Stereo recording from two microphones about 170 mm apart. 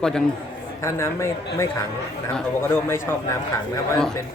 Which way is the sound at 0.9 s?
15° left (ahead or behind).